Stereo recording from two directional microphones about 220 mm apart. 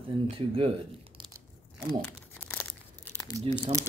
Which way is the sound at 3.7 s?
30° right (ahead or behind).